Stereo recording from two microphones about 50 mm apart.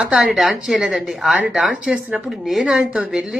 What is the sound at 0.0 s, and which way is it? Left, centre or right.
Speech, right.